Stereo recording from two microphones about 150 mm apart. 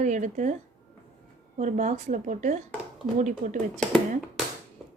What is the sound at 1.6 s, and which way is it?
A woman's voice, 55° right (ahead or behind).